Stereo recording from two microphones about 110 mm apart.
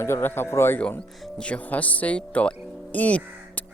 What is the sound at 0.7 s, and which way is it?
Speech, 10° left (ahead or behind).